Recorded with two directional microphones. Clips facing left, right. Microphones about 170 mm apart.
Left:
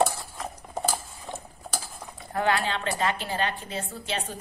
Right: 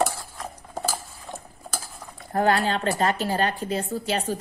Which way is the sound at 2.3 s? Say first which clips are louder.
Right 4 dB; 40° right (ahead or behind).